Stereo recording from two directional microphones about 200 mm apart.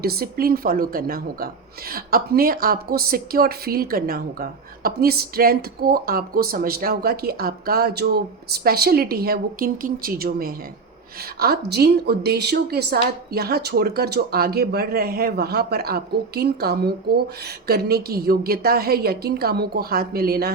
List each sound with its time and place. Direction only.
0.0 s a woman's voice: 50° right (ahead or behind)